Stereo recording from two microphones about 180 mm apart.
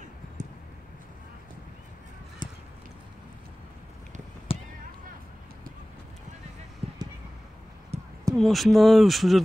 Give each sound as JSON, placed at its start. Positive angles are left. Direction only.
{"t": 4.5, "sound": "fireworks", "side_deg": 30}
{"t": 7.9, "sound": "a sound", "side_deg": -35}
{"t": 8.4, "sound": "speech", "side_deg": 0}